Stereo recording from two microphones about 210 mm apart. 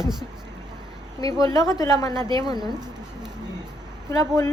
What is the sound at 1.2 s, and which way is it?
A woman's voice, 15° left (ahead or behind).